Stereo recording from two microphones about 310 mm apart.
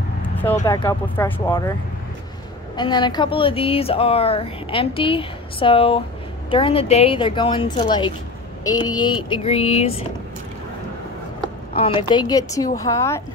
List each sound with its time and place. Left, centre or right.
0.4 s speech: centre
2.7 s speech: centre
11.7 s speech: centre